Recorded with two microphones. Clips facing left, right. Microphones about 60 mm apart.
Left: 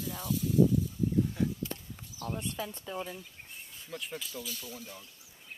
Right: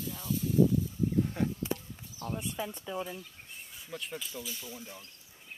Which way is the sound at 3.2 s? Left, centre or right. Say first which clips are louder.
Right 1 dB; centre.